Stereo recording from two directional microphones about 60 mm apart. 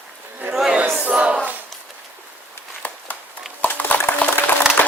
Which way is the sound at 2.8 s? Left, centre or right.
Left.